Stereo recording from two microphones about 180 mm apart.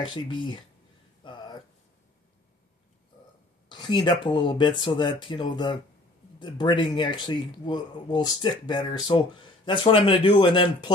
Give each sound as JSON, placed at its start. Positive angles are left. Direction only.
{"t": 0.0, "sound": "speech", "side_deg": 25}
{"t": 1.2, "sound": "a sound", "side_deg": 25}
{"t": 3.6, "sound": "speech", "side_deg": 25}